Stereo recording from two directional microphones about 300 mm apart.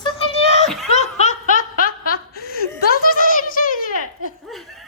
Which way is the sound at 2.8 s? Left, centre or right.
Left.